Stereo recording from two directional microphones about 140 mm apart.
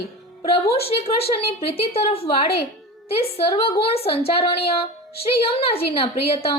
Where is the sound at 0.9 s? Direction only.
45° left (ahead or behind).